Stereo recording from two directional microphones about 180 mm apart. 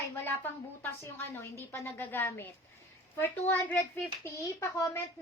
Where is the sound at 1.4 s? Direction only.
15° left (ahead or behind).